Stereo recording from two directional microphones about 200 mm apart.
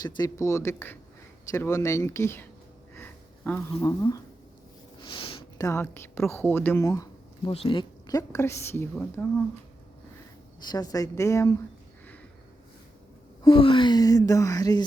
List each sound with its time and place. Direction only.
0.0 s speech: 15° left (ahead or behind)
2.9 s a sound: 10° left (ahead or behind)
4.9 s speech: 25° left (ahead or behind)
10.7 s speech: 20° left (ahead or behind)
13.4 s speech: 25° left (ahead or behind)